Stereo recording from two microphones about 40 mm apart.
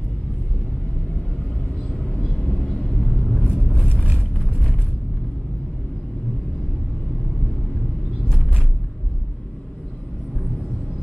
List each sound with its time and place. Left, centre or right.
1.9 s vehicle: centre